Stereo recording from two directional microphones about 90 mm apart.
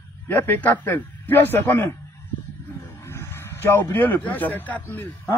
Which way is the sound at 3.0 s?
30° left (ahead or behind).